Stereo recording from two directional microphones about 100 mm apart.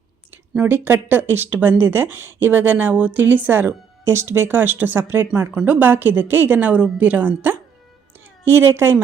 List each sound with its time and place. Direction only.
0.5 s speech: 20° right (ahead or behind)